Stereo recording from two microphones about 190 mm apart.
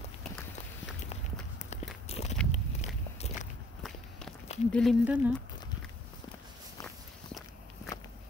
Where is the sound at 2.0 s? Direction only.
35° left (ahead or behind).